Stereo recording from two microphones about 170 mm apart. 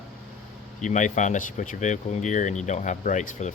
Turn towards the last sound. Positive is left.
turn(degrees=45)  # may be behind; listen again after turning